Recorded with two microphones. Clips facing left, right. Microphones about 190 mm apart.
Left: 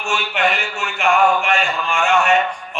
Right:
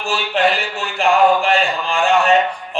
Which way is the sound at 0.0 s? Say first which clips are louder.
Right 3 dB; 35° right (ahead or behind).